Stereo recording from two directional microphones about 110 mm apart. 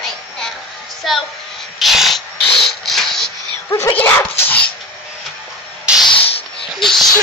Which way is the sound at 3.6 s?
30° left (ahead or behind).